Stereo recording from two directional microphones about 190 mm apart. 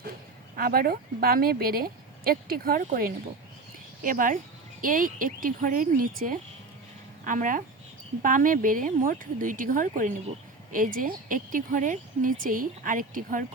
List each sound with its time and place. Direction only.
0.5 s speech: 50° right (ahead or behind)